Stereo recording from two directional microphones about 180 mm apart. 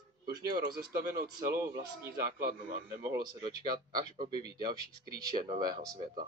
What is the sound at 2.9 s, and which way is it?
Speech, 20° right (ahead or behind).